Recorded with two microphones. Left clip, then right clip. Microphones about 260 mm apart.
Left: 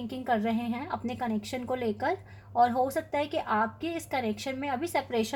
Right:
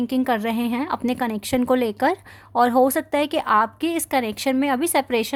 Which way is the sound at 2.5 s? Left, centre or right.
Right.